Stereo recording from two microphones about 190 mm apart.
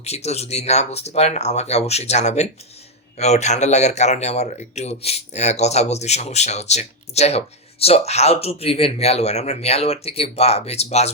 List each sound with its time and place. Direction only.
0.0 s speech: 35° left (ahead or behind)